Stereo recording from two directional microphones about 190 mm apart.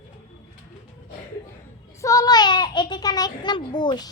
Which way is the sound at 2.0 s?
15° left (ahead or behind).